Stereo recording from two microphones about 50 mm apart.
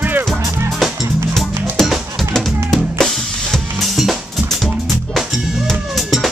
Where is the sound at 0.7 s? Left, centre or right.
Centre.